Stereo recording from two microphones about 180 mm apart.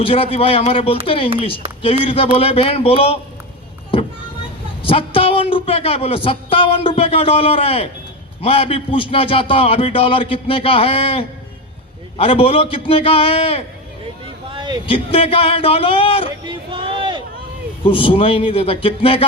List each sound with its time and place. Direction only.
0.0 s a man's voice: 30° left (ahead or behind)
4.8 s a man's voice: 30° left (ahead or behind)
14.5 s a sound: 25° right (ahead or behind)
14.8 s a man's voice: 30° left (ahead or behind)
16.7 s a sound: 30° right (ahead or behind)
17.8 s a man's voice: 30° left (ahead or behind)